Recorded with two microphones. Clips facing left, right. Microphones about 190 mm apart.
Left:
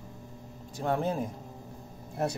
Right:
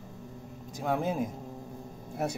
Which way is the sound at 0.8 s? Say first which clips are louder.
Even; 5° right (ahead or behind).